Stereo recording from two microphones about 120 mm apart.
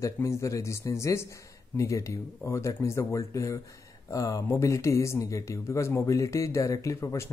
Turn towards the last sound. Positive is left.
turn(degrees=25)  # may be behind; listen again after turning